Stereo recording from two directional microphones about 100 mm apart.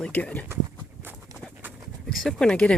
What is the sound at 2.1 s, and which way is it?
Speech, 5° left (ahead or behind).